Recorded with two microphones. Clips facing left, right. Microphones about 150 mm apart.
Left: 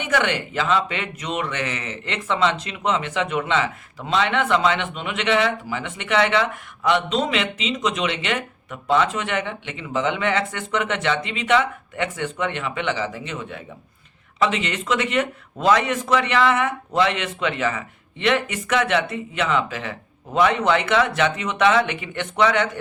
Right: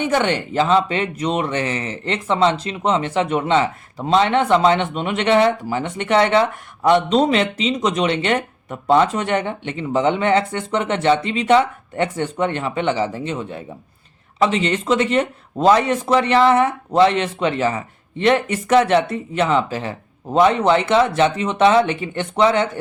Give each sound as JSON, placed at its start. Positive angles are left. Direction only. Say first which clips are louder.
{"t": 0.0, "sound": "speech", "louder": "right 4 dB", "side_deg": -30}